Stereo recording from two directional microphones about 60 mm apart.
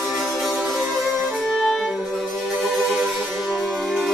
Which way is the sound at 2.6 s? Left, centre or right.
Centre.